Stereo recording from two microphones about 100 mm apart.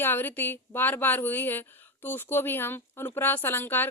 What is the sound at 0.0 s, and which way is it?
Speech, 20° left (ahead or behind).